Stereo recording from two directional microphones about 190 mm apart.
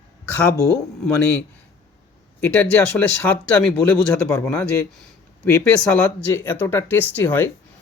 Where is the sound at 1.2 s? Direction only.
5° left (ahead or behind).